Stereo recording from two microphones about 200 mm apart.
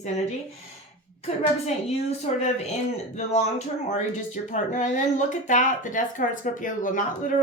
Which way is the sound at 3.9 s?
40° left (ahead or behind).